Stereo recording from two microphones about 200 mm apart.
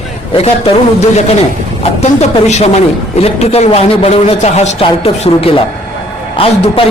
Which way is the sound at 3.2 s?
30° left (ahead or behind).